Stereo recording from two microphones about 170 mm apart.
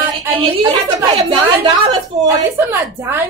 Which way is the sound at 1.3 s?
25° right (ahead or behind).